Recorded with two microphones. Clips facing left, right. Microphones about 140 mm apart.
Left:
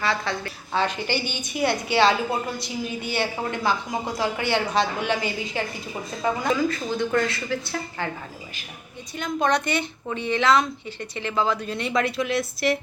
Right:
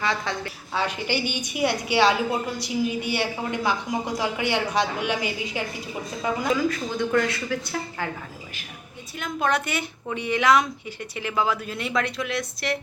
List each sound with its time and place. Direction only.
0.0 s a woman's voice: 20° right (ahead or behind)
9.1 s a woman's voice: 5° right (ahead or behind)